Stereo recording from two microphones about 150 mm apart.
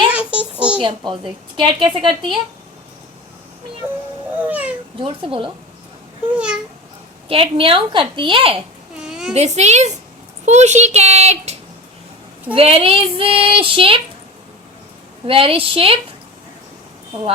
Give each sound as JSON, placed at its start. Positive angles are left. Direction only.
{"t": 0.1, "sound": "a sound", "side_deg": -10}
{"t": 0.8, "sound": "a woman's voice", "side_deg": -30}
{"t": 4.4, "sound": "speech", "side_deg": -10}
{"t": 4.9, "sound": "a woman's voice", "side_deg": -35}
{"t": 6.3, "sound": "speech", "side_deg": -5}
{"t": 7.3, "sound": "a woman's voice", "side_deg": -35}
{"t": 9.0, "sound": "a sound", "side_deg": -5}
{"t": 9.3, "sound": "a child's voice", "side_deg": -45}
{"t": 12.5, "sound": "a woman's voice", "side_deg": -40}
{"t": 15.3, "sound": "a woman's voice", "side_deg": -40}